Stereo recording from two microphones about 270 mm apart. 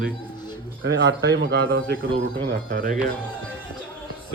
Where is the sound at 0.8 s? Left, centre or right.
Right.